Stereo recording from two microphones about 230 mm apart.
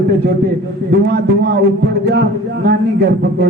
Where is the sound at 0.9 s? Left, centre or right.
Right.